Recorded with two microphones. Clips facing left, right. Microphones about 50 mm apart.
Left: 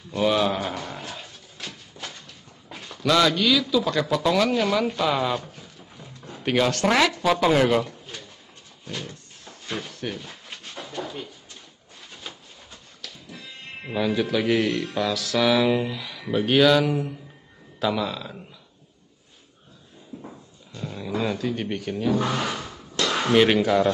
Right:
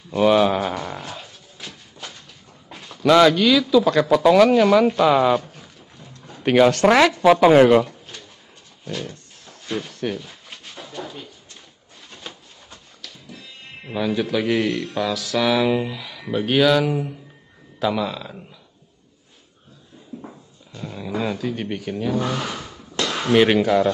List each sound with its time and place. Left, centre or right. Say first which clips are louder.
0.1 s a sound: right 6 dB; centre
3.1 s speech: right 6 dB; right
3.3 s speech: right 5 dB; centre
4.5 s a sound: right 8 dB; centre
6.7 s speech: right 6 dB; centre
7.8 s pigeon: right 4 dB; centre
8.8 s a sound: right 5 dB; centre
13.0 s speech: even; centre
20.2 s dog: right 1 dB; centre